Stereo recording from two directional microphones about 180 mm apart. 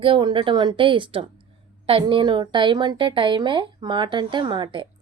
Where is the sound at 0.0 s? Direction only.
25° right (ahead or behind).